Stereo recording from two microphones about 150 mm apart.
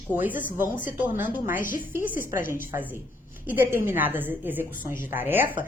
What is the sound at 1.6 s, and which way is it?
Speech, 65° left (ahead or behind).